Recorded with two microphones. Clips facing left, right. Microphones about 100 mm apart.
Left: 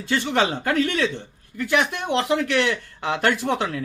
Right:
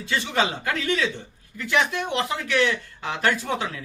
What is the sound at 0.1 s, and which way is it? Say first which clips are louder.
Speech: left 3 dB; 50° left (ahead or behind).